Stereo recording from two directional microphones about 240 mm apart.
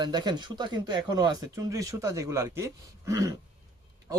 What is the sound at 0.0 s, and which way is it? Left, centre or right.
A man's voice, centre.